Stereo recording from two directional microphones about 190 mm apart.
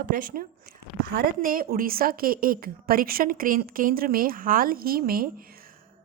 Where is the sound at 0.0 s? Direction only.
50° right (ahead or behind).